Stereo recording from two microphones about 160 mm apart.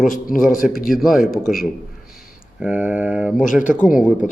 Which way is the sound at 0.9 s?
Centre (ahead or behind).